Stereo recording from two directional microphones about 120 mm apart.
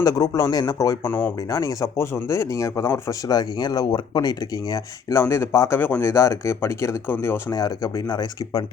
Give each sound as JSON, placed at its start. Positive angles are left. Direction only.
{"t": 0.0, "sound": "speech", "side_deg": 30}
{"t": 1.0, "sound": "speech", "side_deg": 15}
{"t": 1.4, "sound": "speech", "side_deg": 25}
{"t": 5.2, "sound": "speech", "side_deg": 20}